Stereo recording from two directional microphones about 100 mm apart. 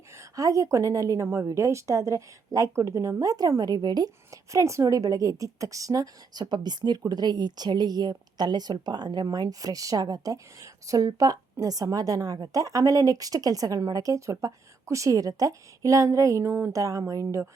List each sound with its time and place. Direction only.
0.2 s a woman's voice: 35° right (ahead or behind)
4.3 s a woman's voice: 30° right (ahead or behind)